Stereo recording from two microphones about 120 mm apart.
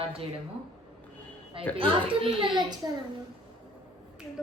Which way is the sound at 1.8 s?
45° right (ahead or behind).